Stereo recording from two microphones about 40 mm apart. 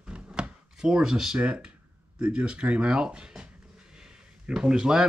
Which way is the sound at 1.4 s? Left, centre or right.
Right.